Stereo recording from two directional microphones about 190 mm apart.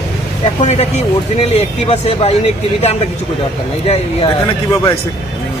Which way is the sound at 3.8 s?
30° left (ahead or behind).